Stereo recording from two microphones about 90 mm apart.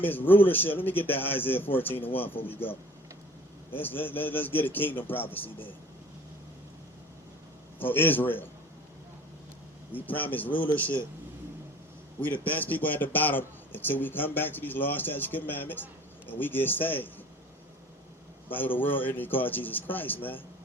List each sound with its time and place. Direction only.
0.0 s a man's voice: 20° left (ahead or behind)
7.8 s a man's voice: 20° left (ahead or behind)
9.9 s a man's voice: 20° left (ahead or behind)
12.2 s a man's voice: 20° left (ahead or behind)
18.4 s a man's voice: 20° left (ahead or behind)